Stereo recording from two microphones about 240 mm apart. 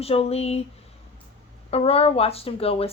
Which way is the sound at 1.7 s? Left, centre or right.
Left.